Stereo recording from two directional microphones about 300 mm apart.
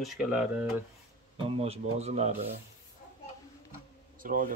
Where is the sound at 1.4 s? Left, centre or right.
Centre.